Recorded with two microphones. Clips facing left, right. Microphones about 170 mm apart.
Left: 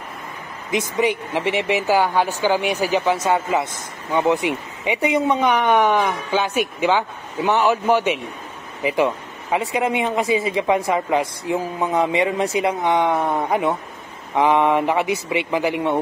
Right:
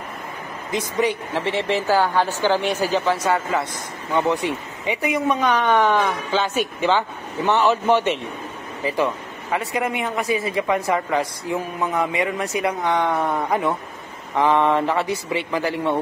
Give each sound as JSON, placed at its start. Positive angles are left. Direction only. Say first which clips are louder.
{"t": 0.7, "sound": "speech", "louder": "left 2 dB", "side_deg": 20}